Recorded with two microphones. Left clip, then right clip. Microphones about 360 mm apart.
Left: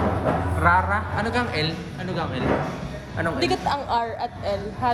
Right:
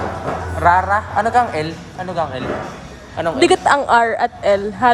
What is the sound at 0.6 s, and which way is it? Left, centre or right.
Speech, right.